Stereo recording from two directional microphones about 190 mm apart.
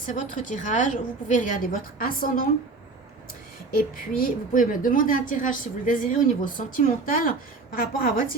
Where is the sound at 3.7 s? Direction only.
45° left (ahead or behind).